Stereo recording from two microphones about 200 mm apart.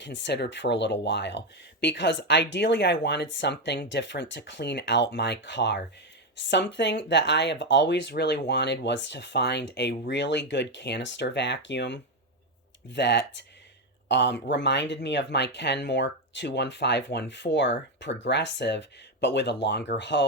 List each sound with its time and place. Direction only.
0.0 s speech: 60° left (ahead or behind)